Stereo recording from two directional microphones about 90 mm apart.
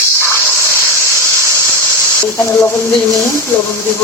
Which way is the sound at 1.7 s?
25° left (ahead or behind).